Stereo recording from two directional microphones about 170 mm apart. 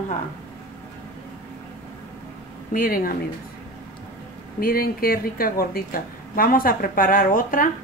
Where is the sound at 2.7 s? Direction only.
55° left (ahead or behind).